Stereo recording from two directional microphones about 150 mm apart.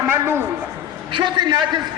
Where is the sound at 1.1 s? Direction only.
30° right (ahead or behind).